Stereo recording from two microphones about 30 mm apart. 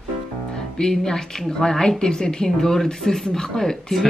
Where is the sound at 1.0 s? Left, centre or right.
Left.